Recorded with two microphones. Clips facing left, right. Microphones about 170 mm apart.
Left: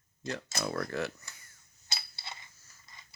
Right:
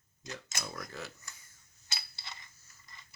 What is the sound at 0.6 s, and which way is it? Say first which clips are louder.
Speech: left 11 dB; 70° left (ahead or behind).